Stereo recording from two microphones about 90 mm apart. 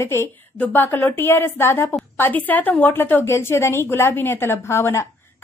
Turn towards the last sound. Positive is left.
turn(degrees=30)  # may be behind; listen again after turning